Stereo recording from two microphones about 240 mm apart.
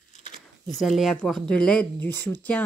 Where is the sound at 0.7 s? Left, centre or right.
Centre.